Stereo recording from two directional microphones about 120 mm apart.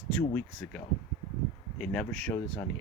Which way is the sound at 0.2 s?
15° left (ahead or behind).